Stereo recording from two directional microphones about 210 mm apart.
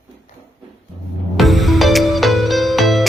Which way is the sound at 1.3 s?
Centre (ahead or behind).